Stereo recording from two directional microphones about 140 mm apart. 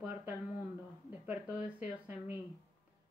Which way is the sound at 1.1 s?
10° right (ahead or behind).